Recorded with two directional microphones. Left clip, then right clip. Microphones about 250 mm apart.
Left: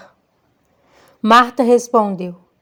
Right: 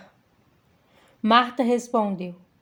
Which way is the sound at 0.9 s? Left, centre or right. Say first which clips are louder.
Left 8 dB; left.